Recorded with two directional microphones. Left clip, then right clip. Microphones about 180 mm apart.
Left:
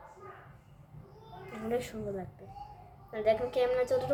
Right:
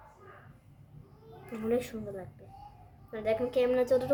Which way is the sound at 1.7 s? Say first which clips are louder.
Right 2 dB; 20° right (ahead or behind).